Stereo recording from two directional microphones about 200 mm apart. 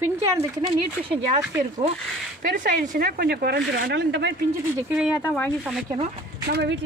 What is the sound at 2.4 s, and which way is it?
A woman's voice, 40° right (ahead or behind).